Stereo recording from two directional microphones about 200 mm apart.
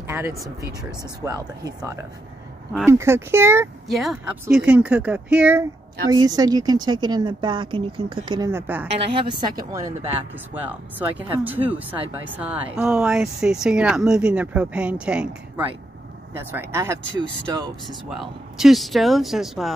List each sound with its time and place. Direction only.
0.0 s a sound: 10° right (ahead or behind)
1.2 s speech: 15° right (ahead or behind)
3.9 s speech: centre (ahead or behind)
6.1 s speech: 20° right (ahead or behind)
9.1 s speech: 25° right (ahead or behind)
9.7 s speech: 10° right (ahead or behind)
11.6 s speech: 25° right (ahead or behind)
12.4 s speech: 5° right (ahead or behind)
17.8 s speech: centre (ahead or behind)